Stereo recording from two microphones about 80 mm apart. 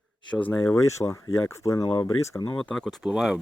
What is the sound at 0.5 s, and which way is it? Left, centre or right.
Speech, left.